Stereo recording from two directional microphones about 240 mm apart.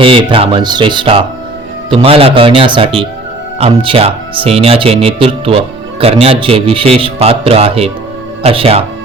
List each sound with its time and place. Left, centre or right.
0.0 s speech: right